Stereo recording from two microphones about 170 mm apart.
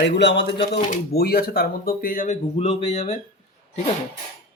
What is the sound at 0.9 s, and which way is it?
Speech, 65° left (ahead or behind).